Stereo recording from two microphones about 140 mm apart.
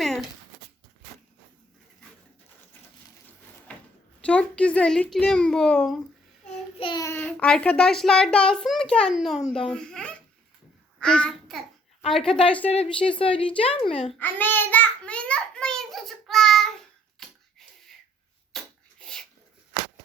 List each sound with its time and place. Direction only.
0.0 s a sound: centre (ahead or behind)
4.2 s a child's voice: 10° left (ahead or behind)
6.7 s a woman's voice: 40° left (ahead or behind)
7.2 s a child's voice: 10° left (ahead or behind)
12.6 s a woman's voice: 45° left (ahead or behind)
14.2 s a sound: 15° left (ahead or behind)
18.5 s rub: 5° left (ahead or behind)